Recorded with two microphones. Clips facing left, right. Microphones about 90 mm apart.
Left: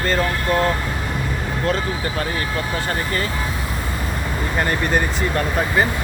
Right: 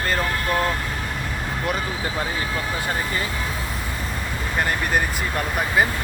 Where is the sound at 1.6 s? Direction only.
10° right (ahead or behind).